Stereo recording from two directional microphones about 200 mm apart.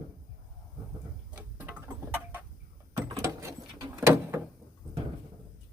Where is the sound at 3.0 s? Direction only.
15° right (ahead or behind).